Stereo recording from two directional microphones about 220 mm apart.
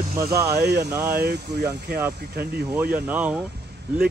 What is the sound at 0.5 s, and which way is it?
Speech, 50° right (ahead or behind).